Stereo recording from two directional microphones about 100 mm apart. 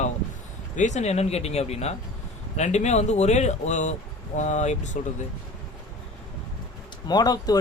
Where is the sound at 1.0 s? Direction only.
90° left.